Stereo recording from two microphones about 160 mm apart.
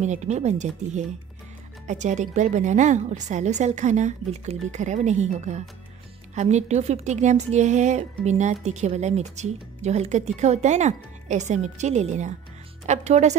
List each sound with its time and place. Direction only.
0.0 s speech: 45° right (ahead or behind)